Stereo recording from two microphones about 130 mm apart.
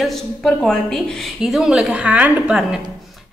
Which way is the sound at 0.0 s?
Centre (ahead or behind).